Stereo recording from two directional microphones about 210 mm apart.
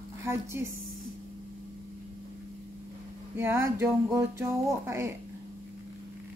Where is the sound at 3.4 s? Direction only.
10° right (ahead or behind).